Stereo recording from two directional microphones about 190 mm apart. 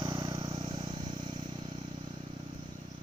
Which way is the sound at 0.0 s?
25° right (ahead or behind).